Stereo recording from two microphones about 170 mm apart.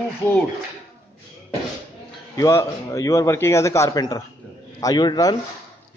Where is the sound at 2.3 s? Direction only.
15° left (ahead or behind).